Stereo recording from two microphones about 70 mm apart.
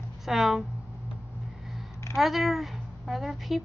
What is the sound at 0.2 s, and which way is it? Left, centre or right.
Speech, centre.